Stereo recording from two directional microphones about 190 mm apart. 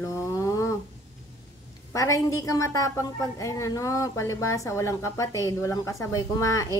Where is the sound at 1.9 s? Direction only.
15° left (ahead or behind).